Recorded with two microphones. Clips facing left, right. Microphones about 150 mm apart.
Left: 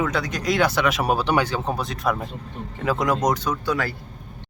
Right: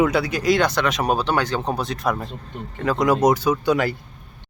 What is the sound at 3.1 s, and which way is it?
Speech, 10° right (ahead or behind).